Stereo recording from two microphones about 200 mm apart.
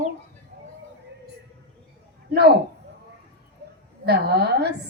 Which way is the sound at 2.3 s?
55° right (ahead or behind).